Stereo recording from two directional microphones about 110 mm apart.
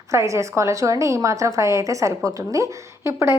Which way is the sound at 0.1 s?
30° right (ahead or behind).